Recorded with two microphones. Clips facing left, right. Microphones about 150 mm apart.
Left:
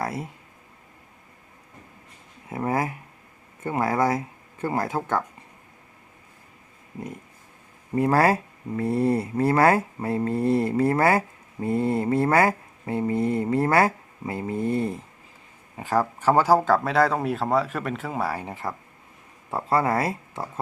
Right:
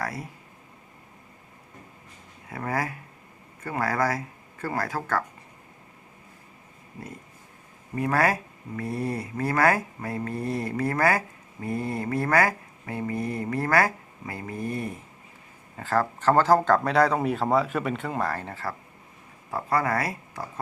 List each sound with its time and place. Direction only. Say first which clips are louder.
0.0 s speech: left 3 dB; 25° left (ahead or behind)
2.5 s speech: left 4 dB; 20° left (ahead or behind)
7.9 s speech: left 4 dB; 30° left (ahead or behind)
15.8 s speech: left 1 dB; 15° left (ahead or behind)